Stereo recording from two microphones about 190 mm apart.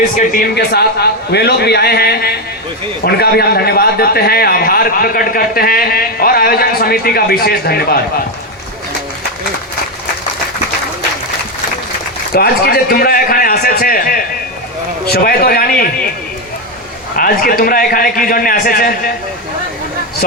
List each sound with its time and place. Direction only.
0.3 s a man's voice: 60° left (ahead or behind)
12.3 s a man's voice: 55° left (ahead or behind)
17.2 s a man's voice: 50° left (ahead or behind)